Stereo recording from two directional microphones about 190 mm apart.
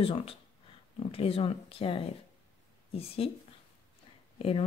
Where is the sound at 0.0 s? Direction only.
30° left (ahead or behind).